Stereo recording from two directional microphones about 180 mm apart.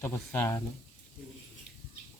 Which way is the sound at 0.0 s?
15° left (ahead or behind).